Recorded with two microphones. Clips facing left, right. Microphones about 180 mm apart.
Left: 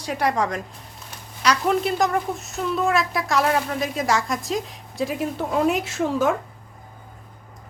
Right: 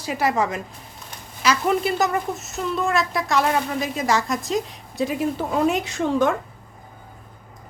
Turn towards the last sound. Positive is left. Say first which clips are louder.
# right 1 dB
turn(degrees=5)  # may be behind; listen again after turning